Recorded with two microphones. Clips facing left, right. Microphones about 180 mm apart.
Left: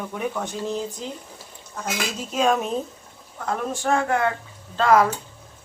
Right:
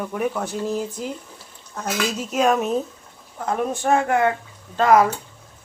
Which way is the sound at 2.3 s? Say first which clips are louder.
Right 2 dB; 5° right (ahead or behind).